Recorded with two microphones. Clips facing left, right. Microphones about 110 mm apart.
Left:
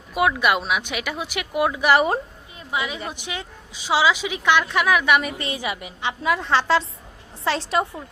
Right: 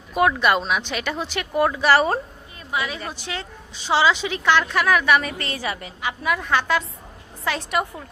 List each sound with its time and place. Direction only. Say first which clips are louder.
0.1 s speech: right 1 dB; 5° left (ahead or behind)
6.0 s a woman's voice: left 2 dB; 25° left (ahead or behind)